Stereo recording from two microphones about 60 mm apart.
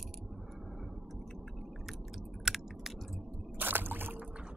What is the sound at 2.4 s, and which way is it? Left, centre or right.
Chewing, centre.